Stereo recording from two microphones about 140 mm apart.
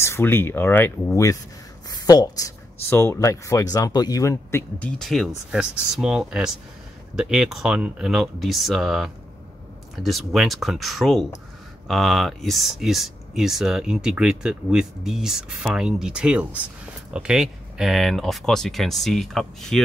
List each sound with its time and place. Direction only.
0.0 s speech: 15° left (ahead or behind); by 19.8 s centre (ahead or behind)